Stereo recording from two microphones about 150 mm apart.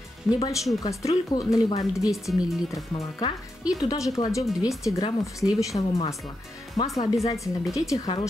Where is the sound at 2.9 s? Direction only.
35° left (ahead or behind).